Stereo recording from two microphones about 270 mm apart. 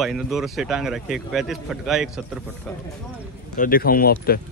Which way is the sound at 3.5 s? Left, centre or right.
Left.